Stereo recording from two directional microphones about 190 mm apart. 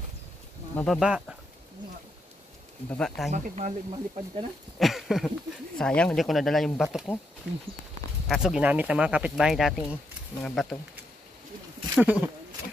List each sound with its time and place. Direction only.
0.7 s speech: centre (ahead or behind)
2.9 s speech: 5° left (ahead or behind)
3.3 s speech: 40° right (ahead or behind)
4.7 s speech: centre (ahead or behind)
8.3 s speech: centre (ahead or behind)
11.9 s speech: 5° right (ahead or behind)